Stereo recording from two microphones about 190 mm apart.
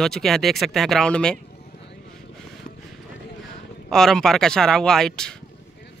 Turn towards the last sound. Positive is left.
turn(degrees=5)  # may be behind; listen again after turning